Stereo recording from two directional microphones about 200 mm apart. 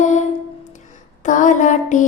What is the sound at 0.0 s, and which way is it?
Music, 35° left (ahead or behind).